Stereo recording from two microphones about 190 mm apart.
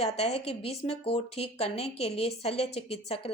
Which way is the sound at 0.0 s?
35° left (ahead or behind).